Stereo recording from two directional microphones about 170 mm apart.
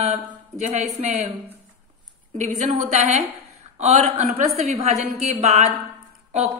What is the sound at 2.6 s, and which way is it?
A woman's voice, 40° right (ahead or behind).